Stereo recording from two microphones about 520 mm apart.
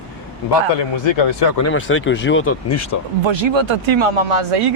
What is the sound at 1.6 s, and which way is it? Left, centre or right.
Speech, left.